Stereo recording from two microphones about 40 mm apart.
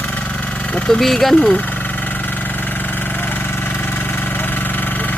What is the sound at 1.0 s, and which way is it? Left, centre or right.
Speech, centre.